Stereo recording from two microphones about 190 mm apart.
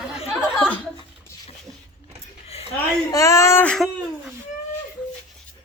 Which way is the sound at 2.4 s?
30° left (ahead or behind).